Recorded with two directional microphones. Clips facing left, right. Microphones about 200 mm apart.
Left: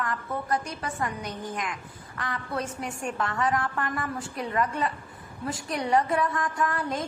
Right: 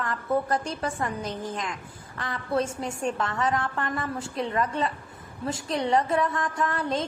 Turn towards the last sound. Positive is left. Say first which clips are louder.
# right 1 dB
turn(degrees=-25)  # may be behind; listen again after turning